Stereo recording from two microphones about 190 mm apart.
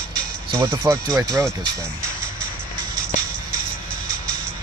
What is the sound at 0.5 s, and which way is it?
Speech, 20° right (ahead or behind).